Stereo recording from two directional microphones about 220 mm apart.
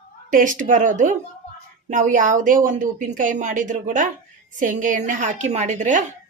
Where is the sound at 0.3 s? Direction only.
35° right (ahead or behind).